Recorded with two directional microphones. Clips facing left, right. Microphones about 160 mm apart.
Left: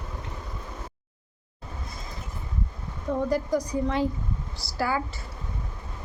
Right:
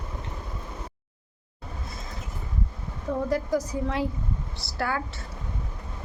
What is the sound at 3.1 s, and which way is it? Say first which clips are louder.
A woman's voice: left 1 dB; centre (ahead or behind).